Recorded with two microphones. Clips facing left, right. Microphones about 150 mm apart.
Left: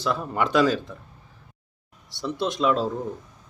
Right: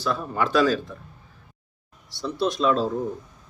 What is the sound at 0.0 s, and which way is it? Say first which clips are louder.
Speech: even; 20° left (ahead or behind).